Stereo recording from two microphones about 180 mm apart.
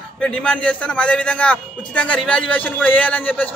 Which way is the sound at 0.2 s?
5° left (ahead or behind).